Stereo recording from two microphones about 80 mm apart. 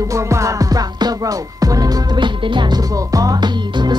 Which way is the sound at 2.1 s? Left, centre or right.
Right.